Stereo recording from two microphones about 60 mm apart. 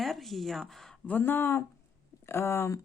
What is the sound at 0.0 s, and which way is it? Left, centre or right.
Speech, centre.